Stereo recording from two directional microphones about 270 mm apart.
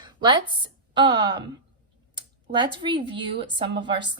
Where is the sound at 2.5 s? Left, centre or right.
Centre.